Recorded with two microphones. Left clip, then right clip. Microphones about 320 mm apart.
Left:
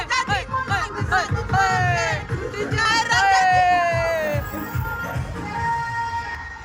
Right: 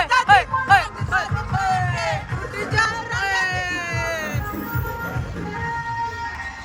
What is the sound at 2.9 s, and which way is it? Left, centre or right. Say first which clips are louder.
Music: left 7 dB; left.